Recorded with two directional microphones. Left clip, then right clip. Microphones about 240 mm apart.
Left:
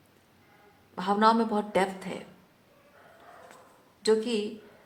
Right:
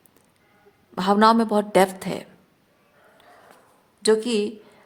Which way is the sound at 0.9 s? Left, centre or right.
Right.